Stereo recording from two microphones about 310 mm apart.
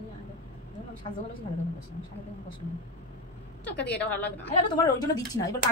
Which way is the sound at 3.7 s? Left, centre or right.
Centre.